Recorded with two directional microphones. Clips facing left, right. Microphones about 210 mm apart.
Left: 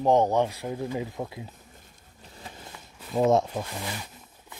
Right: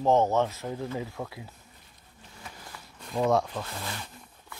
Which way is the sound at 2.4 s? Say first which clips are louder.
Left 2 dB; 25° left (ahead or behind).